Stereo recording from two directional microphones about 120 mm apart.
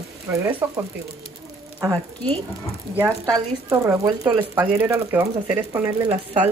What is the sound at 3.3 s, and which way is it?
Speech, 25° right (ahead or behind).